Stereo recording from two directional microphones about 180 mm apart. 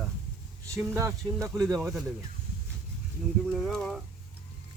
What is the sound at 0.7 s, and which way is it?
Speech, 15° right (ahead or behind).